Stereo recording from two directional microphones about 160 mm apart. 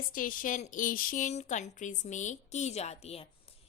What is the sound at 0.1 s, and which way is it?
A woman's voice, 60° left (ahead or behind).